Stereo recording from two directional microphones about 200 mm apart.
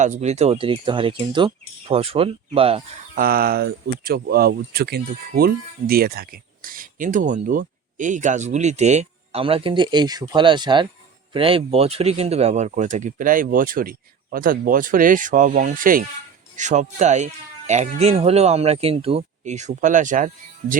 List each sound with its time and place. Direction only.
0.0 s speech: 35° right (ahead or behind)
3.2 s speech: 50° right (ahead or behind)